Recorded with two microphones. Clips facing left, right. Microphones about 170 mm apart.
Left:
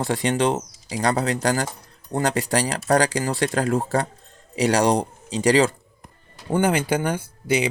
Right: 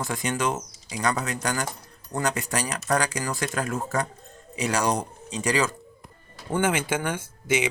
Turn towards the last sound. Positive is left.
turn(degrees=35)  # may be behind; listen again after turning